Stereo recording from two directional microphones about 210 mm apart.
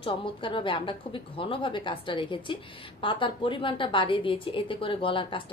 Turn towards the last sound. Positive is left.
turn(degrees=25)  # may be behind; listen again after turning